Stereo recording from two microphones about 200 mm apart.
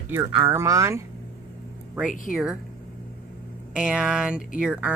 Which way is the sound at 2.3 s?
5° right (ahead or behind).